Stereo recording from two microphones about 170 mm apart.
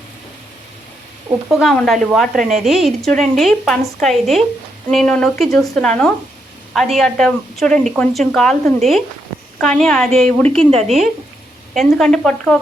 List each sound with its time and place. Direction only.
1.5 s a woman's voice: centre (ahead or behind)
10.6 s speech: 35° right (ahead or behind)
11.7 s a woman's voice: centre (ahead or behind)